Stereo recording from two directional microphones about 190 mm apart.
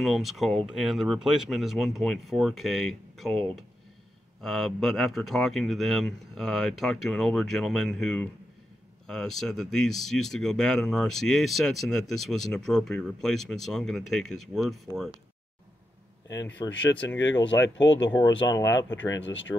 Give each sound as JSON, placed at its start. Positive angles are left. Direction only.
{"t": 0.0, "sound": "speech", "side_deg": 0}
{"t": 16.6, "sound": "speech", "side_deg": 20}
{"t": 17.2, "sound": "speech", "side_deg": 75}
{"t": 19.1, "sound": "speech", "side_deg": 75}